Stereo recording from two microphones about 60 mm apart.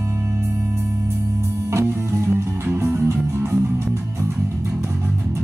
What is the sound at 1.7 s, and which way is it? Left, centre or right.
Music, right.